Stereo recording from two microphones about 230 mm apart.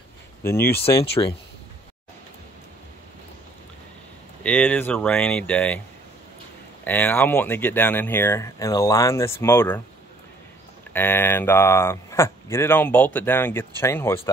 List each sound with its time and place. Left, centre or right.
0.4 s speech: centre
4.4 s speech: centre
6.8 s speech: centre
10.9 s speech: centre